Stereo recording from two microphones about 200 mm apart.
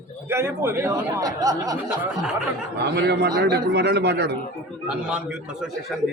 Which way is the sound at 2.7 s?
55° right (ahead or behind).